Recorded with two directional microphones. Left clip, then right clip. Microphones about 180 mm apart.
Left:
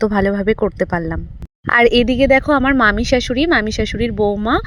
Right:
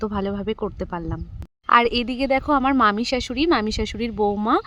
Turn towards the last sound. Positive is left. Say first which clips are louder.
# left 4 dB
turn(degrees=15)  # may be behind; listen again after turning